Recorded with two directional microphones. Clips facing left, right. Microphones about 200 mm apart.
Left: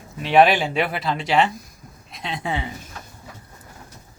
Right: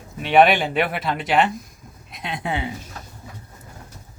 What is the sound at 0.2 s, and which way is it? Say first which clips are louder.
Speech: even; centre (ahead or behind).